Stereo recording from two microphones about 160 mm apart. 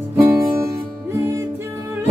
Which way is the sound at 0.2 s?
15° right (ahead or behind).